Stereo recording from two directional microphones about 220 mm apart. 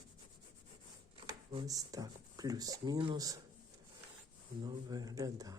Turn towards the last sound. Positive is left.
turn(degrees=-15)  # may be behind; listen again after turning